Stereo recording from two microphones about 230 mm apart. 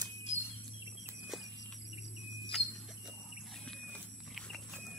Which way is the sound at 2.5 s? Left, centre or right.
Centre.